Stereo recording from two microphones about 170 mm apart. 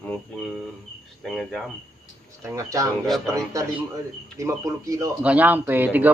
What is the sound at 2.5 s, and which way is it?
Speech, 20° right (ahead or behind).